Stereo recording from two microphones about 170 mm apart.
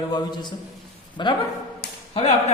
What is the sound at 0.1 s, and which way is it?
A man's voice, 25° left (ahead or behind).